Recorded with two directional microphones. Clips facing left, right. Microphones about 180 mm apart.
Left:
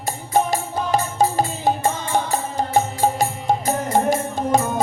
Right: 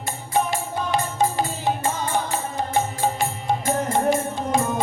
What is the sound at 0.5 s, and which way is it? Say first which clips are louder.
Music: left 3 dB; 40° left (ahead or behind).